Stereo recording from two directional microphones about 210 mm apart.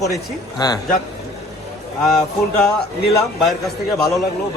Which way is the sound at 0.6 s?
20° left (ahead or behind).